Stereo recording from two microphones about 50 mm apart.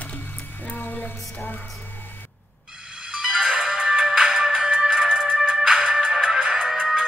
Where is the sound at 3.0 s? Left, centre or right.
Centre.